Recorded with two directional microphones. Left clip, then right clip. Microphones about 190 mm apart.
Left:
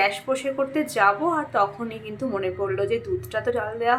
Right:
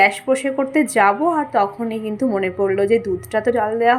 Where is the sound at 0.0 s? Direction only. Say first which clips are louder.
Right 7 dB; 20° right (ahead or behind).